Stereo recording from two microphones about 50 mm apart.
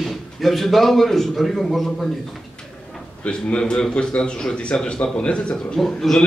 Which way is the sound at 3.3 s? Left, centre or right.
Centre.